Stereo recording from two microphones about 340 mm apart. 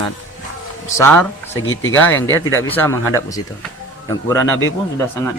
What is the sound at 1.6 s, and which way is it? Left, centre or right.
Speech, left.